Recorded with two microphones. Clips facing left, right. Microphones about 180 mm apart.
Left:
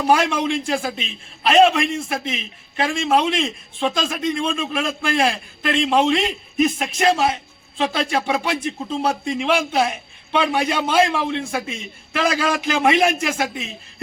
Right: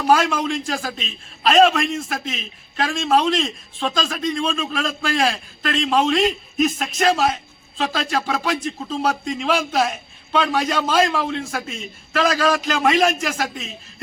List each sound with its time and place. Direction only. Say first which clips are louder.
0.1 s a man's voice: right 1 dB; 15° left (ahead or behind)
2.2 s a man's voice: left 2 dB; 10° left (ahead or behind)